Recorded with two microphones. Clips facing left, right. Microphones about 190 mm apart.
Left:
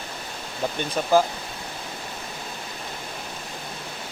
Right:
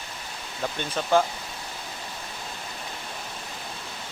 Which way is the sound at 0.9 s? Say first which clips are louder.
Left 2 dB; 5° left (ahead or behind).